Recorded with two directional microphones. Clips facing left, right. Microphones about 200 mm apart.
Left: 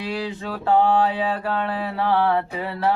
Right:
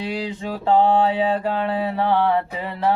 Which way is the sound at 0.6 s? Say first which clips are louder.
Right 1 dB; 20° right (ahead or behind).